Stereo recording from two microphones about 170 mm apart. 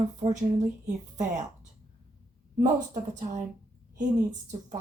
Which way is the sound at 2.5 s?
50° right (ahead or behind).